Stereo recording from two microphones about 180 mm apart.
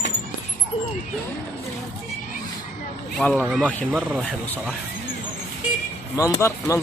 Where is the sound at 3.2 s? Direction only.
10° left (ahead or behind).